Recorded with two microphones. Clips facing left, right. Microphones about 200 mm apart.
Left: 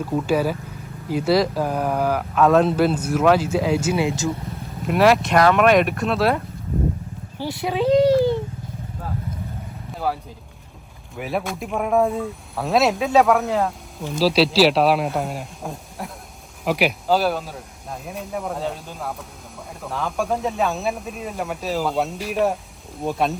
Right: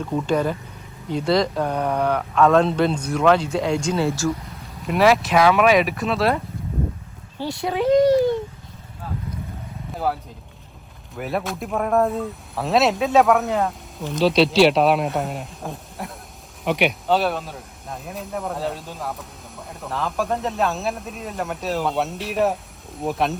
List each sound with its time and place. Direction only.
0.0 s speech: 5° left (ahead or behind)
4.8 s speech: centre (ahead or behind)
7.3 s speech: 20° right (ahead or behind)
7.6 s speech: 20° left (ahead or behind)
11.1 s speech: centre (ahead or behind)